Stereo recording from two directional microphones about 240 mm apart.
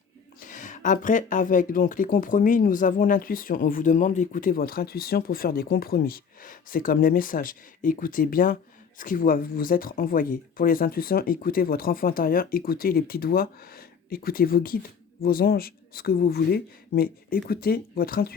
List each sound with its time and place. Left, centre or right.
0.4 s speech: left